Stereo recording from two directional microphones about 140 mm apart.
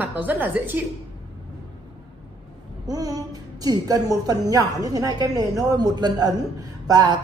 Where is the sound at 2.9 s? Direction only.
25° right (ahead or behind).